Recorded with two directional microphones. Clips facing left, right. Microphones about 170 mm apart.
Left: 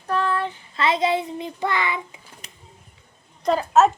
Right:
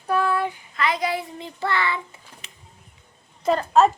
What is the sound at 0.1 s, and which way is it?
Child singing, 10° right (ahead or behind).